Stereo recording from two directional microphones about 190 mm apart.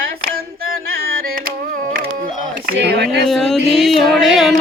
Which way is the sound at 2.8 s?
60° right (ahead or behind).